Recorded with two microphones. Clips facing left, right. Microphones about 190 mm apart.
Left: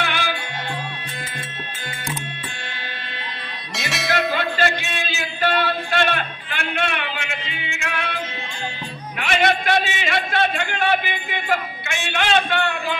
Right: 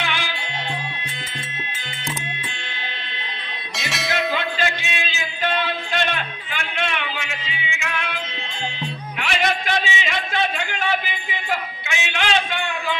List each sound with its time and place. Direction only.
0.0 s music: 50° left (ahead or behind)
3.7 s music: centre (ahead or behind)
4.4 s music: 55° left (ahead or behind)
5.7 s a sound: 55° left (ahead or behind)
7.7 s music: 55° left (ahead or behind)
9.2 s a sound: 55° left (ahead or behind)